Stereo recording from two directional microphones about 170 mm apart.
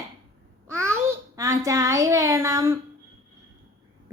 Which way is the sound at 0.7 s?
15° right (ahead or behind).